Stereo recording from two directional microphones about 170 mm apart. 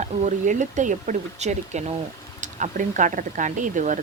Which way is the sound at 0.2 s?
45° right (ahead or behind).